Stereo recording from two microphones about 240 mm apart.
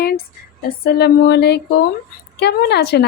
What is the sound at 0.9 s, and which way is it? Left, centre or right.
Speech, left.